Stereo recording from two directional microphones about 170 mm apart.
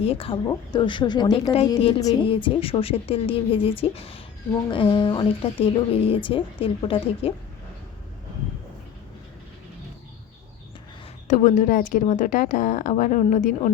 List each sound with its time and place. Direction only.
0.0 s a woman's voice: 35° left (ahead or behind)
2.3 s a woman's voice: 30° left (ahead or behind)
11.3 s a woman's voice: 45° left (ahead or behind)